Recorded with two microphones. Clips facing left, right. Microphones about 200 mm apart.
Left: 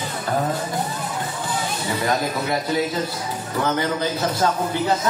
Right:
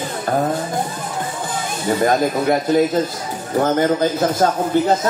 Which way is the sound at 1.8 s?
50° right (ahead or behind).